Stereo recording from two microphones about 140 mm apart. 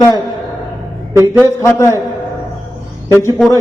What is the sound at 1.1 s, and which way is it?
Mantra, 20° right (ahead or behind).